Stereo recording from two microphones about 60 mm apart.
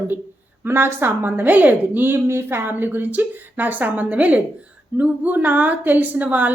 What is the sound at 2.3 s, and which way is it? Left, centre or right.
A woman's voice, right.